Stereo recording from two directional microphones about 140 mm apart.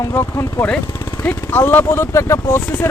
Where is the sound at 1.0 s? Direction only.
30° left (ahead or behind).